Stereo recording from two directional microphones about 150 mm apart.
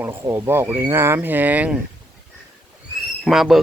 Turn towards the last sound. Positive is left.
turn(degrees=0)  # may be behind; listen again after turning